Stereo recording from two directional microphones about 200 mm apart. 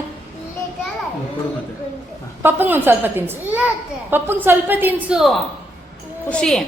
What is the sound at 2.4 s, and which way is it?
A woman's voice, 10° right (ahead or behind).